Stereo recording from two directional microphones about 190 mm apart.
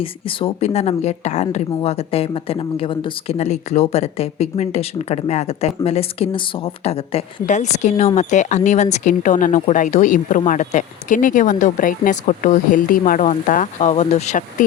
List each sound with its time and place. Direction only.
0.0 s speech: 30° left (ahead or behind)